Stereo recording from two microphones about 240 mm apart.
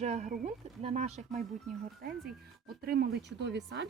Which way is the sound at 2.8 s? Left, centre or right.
Right.